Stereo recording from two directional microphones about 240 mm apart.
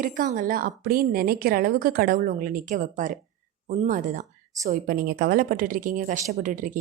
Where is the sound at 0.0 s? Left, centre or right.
Right.